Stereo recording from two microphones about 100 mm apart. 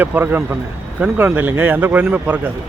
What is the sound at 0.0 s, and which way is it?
Speech, 20° right (ahead or behind).